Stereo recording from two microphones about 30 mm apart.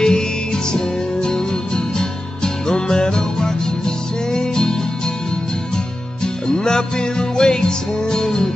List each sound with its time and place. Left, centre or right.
0.0 s music: left
6.2 s music: left